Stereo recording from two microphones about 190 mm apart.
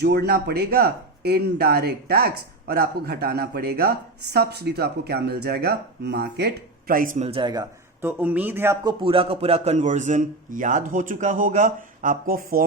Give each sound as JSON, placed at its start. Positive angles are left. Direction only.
{"t": 0.0, "sound": "speech", "side_deg": -60}